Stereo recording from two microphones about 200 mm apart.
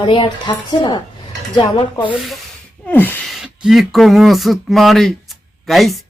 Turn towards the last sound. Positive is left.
turn(degrees=0)  # may be behind; listen again after turning